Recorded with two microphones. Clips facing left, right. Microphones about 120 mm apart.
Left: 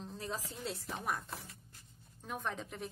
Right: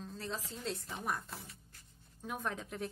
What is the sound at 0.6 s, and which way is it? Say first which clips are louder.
Speech: even; centre (ahead or behind).